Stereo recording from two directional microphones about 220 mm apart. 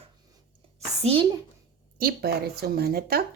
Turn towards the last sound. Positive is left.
turn(degrees=-45)  # may be behind; listen again after turning